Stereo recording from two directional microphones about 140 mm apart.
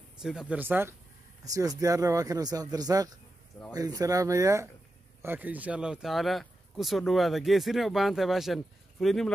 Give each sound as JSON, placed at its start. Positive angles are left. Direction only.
{"t": 0.2, "sound": "speech", "side_deg": -5}
{"t": 1.4, "sound": "speech", "side_deg": -25}